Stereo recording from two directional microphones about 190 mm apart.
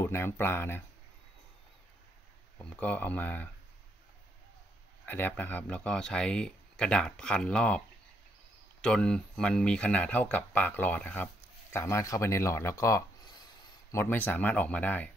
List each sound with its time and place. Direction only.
0.0 s speech: 10° left (ahead or behind)
2.6 s speech: 10° left (ahead or behind)
5.0 s speech: 10° left (ahead or behind)
8.8 s speech: 5° left (ahead or behind)